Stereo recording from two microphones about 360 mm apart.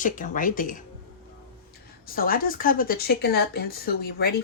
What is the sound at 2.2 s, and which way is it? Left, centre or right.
Speech, left.